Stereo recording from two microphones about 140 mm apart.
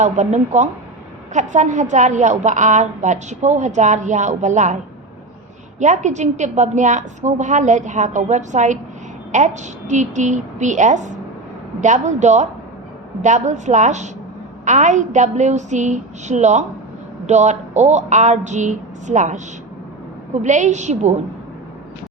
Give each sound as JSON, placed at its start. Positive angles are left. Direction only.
{"t": 0.0, "sound": "a woman's voice", "side_deg": -55}
{"t": 5.8, "sound": "a woman's voice", "side_deg": -60}